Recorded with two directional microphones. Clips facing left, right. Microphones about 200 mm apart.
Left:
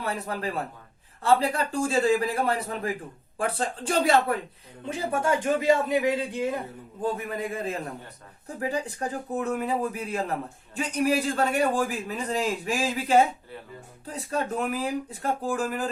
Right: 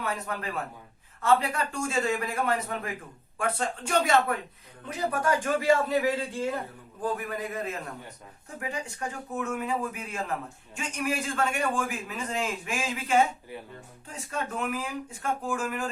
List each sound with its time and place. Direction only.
0.0 s a man's voice: 35° left (ahead or behind)